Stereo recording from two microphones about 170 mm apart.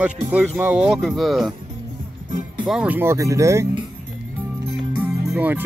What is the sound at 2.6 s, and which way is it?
Speech, 5° right (ahead or behind).